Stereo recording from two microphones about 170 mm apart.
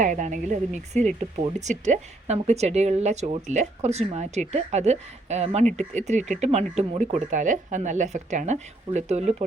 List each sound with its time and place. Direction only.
0.0 s speech: 45° right (ahead or behind)